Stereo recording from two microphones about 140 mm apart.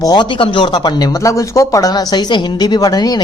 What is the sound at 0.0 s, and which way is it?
Speech, 30° left (ahead or behind).